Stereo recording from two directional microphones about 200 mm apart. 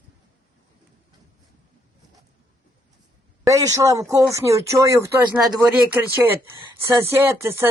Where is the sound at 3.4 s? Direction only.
15° right (ahead or behind).